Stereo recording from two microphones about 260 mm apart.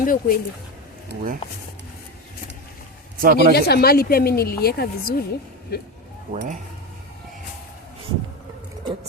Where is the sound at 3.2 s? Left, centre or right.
Right.